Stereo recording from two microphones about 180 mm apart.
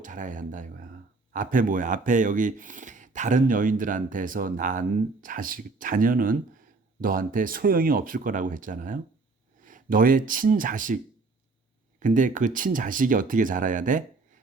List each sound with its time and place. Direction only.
0.0 s speech: 45° right (ahead or behind)